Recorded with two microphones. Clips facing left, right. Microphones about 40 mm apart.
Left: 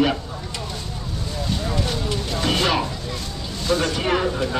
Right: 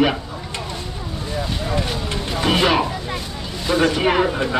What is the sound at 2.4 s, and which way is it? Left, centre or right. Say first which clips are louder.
A man's voice: right 4 dB; centre.